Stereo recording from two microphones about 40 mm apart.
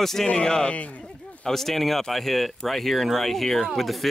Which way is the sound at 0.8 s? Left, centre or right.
Left.